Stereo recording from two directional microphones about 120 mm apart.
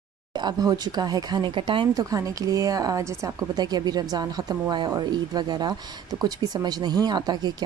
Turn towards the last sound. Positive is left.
turn(degrees=-35)  # may be behind; listen again after turning